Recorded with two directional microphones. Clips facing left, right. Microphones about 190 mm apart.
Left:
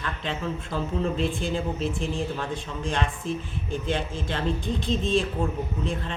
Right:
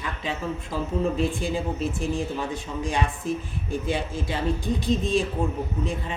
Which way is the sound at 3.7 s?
5° right (ahead or behind).